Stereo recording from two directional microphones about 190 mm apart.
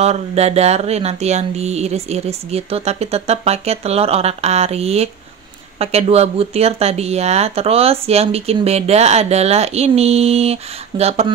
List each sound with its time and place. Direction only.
0.0 s speech: 35° right (ahead or behind)